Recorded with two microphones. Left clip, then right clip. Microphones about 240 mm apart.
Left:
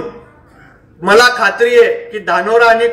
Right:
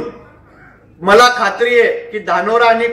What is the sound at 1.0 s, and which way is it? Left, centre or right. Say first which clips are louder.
A man's voice: even; left.